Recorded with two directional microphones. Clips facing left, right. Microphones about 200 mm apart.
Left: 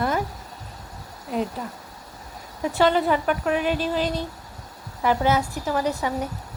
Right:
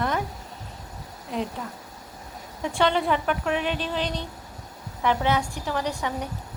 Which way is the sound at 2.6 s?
5° left (ahead or behind).